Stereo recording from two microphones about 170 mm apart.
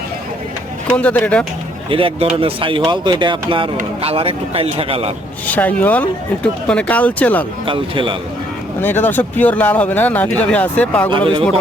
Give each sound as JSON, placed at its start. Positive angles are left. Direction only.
{"t": 0.9, "sound": "speech", "side_deg": 10}
{"t": 1.9, "sound": "speech", "side_deg": -30}
{"t": 5.5, "sound": "speech", "side_deg": 10}
{"t": 7.6, "sound": "speech", "side_deg": -30}
{"t": 8.8, "sound": "speech", "side_deg": 10}